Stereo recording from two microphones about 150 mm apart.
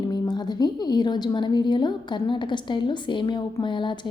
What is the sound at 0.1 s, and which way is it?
A woman's voice, 25° left (ahead or behind).